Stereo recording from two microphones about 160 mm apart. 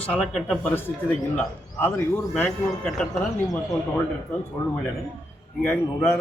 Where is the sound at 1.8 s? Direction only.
15° left (ahead or behind).